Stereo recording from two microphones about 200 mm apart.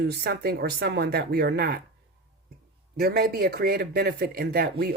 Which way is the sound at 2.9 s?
50° right (ahead or behind).